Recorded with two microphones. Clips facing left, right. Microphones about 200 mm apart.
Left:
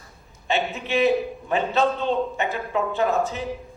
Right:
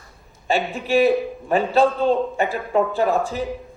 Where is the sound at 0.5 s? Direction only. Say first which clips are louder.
Right 4 dB; centre (ahead or behind).